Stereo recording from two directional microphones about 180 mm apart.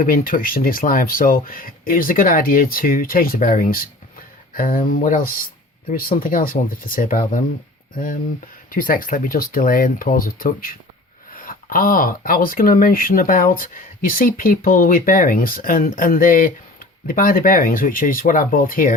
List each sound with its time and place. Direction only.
0.0 s speech: 50° left (ahead or behind)
8.7 s speech: 50° left (ahead or behind)